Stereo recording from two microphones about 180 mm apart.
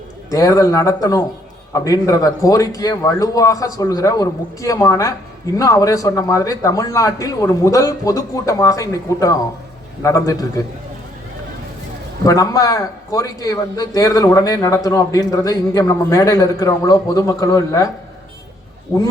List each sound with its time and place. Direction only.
0.3 s a man's voice: 20° left (ahead or behind)
12.2 s a man's voice: 20° left (ahead or behind)